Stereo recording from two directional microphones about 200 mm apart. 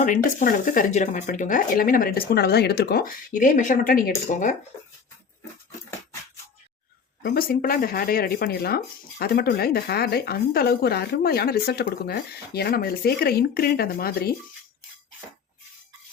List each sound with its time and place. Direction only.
0.0 s speech: 40° left (ahead or behind)
7.2 s speech: 50° left (ahead or behind)